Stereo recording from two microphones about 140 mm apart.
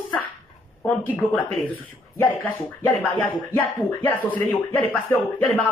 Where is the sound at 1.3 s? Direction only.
10° left (ahead or behind).